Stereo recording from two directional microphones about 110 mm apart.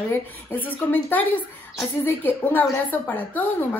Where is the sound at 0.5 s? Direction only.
15° left (ahead or behind).